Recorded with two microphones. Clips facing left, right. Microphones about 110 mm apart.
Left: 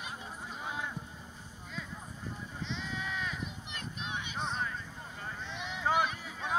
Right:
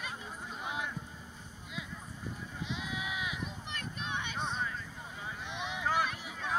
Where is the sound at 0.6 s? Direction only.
15° right (ahead or behind).